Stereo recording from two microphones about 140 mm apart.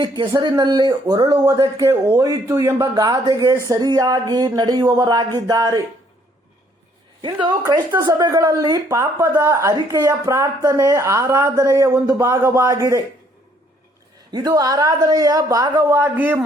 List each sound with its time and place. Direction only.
0.0 s a woman's voice: 30° right (ahead or behind)
7.7 s a woman's voice: 30° right (ahead or behind)
14.3 s a woman's voice: 30° right (ahead or behind)
15.8 s a man's voice: 15° right (ahead or behind)